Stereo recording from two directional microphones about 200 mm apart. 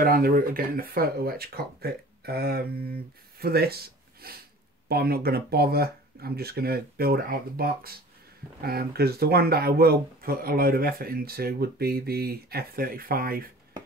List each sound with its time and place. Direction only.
0.0 s speech: 45° right (ahead or behind)